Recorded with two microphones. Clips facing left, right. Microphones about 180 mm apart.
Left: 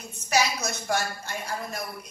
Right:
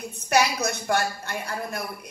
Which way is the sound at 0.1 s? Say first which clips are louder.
Right 3 dB; 60° right (ahead or behind).